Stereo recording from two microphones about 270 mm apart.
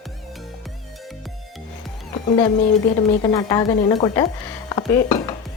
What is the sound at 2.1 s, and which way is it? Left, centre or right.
Music, centre.